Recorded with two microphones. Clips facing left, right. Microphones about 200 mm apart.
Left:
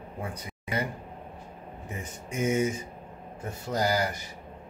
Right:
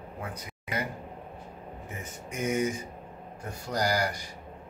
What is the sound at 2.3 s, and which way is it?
Speech, 25° left (ahead or behind).